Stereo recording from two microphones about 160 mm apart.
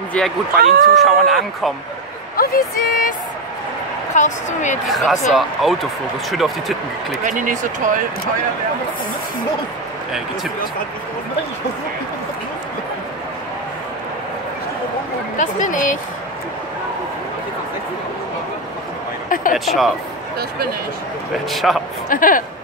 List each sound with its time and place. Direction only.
0.2 s speech: 5° left (ahead or behind)
0.6 s speech: 65° right (ahead or behind)
0.9 s speech: centre (ahead or behind)
2.3 s a sound: 65° left (ahead or behind)
2.7 s speech: 65° left (ahead or behind)
4.1 s a woman's voice: 50° left (ahead or behind)
4.8 s speech: centre (ahead or behind)
7.2 s speech: 55° right (ahead or behind)
15.3 s speech: 55° left (ahead or behind)
19.2 s a sound: 60° left (ahead or behind)
19.5 s speech: centre (ahead or behind)
21.5 s speech: centre (ahead or behind)
22.1 s speech: 55° left (ahead or behind)